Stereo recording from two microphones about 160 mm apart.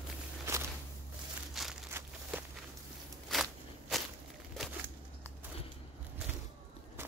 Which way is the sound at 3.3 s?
Centre (ahead or behind).